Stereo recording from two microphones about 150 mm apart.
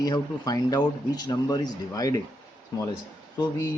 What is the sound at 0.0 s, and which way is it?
Speech, 25° left (ahead or behind).